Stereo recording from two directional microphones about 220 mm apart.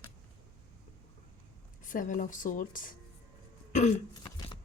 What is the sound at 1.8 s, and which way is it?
Speech, 35° left (ahead or behind).